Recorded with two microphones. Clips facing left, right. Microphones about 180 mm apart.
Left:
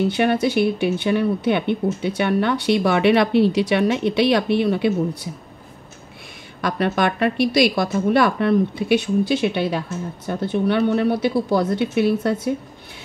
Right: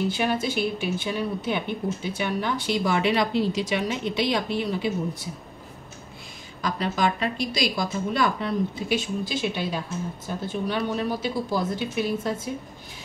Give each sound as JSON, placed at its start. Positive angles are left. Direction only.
{"t": 0.1, "sound": "speech", "side_deg": 65}
{"t": 6.6, "sound": "speech", "side_deg": 65}